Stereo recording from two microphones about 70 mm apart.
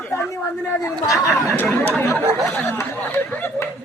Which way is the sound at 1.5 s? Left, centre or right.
Left.